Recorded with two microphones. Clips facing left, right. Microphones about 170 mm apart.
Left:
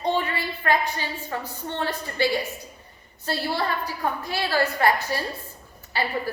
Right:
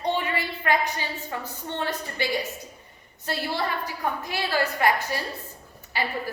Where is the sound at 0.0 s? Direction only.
15° right (ahead or behind).